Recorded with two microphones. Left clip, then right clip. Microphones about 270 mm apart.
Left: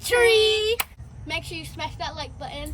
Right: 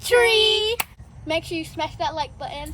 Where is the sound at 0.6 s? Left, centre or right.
Centre.